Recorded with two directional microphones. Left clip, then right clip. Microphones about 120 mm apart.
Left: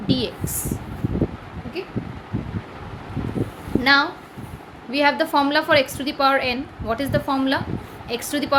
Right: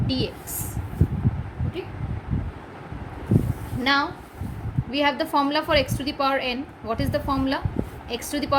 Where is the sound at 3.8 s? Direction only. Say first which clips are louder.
Left 5 dB; 25° left (ahead or behind).